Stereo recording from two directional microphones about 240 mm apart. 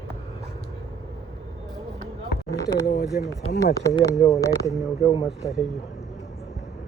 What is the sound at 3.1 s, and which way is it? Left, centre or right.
Speech, left.